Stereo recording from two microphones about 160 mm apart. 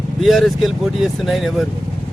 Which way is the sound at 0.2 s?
Centre (ahead or behind).